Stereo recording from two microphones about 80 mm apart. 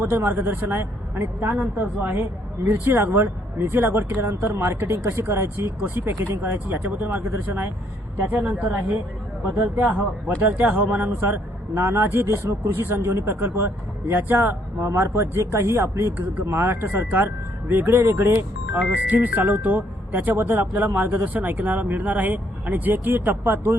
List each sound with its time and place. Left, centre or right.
0.0 s a woman's voice: right